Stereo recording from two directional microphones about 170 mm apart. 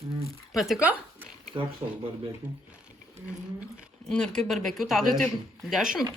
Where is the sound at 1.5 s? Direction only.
25° right (ahead or behind).